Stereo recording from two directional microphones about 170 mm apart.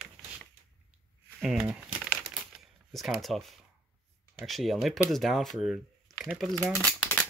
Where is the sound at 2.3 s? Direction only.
Centre (ahead or behind).